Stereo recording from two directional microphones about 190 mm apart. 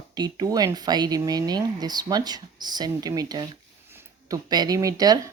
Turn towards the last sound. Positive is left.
turn(degrees=-20)  # may be behind; listen again after turning